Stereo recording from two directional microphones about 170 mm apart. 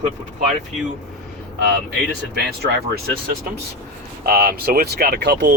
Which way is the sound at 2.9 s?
65° right (ahead or behind).